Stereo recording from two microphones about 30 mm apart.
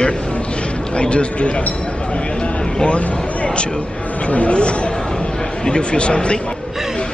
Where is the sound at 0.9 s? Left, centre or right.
Left.